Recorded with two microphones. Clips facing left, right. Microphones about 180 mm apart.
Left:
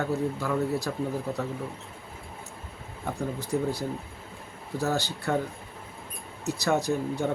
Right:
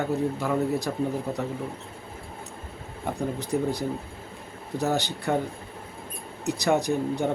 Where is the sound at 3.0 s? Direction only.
15° right (ahead or behind).